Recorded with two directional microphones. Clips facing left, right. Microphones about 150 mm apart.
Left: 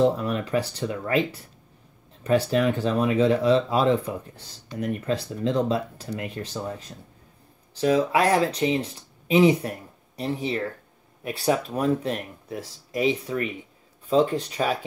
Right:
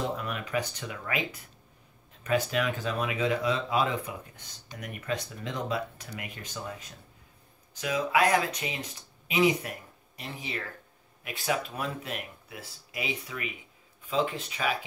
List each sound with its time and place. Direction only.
0.0 s speech: 35° left (ahead or behind)